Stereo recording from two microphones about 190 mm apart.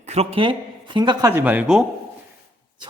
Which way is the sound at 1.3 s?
10° right (ahead or behind).